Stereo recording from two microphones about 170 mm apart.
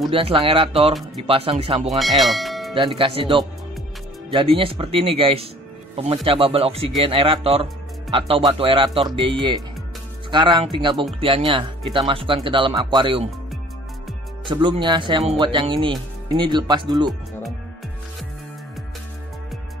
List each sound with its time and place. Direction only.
0.1 s speech: 30° right (ahead or behind)
2.0 s speech: centre (ahead or behind)
2.7 s speech: 30° right (ahead or behind)
14.5 s speech: 25° right (ahead or behind)